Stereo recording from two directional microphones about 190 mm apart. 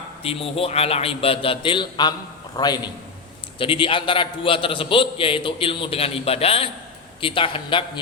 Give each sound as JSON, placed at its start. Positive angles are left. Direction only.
{"t": 0.2, "sound": "a man's voice", "side_deg": 30}